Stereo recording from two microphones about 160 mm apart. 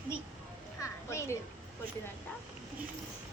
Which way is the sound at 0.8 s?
20° left (ahead or behind).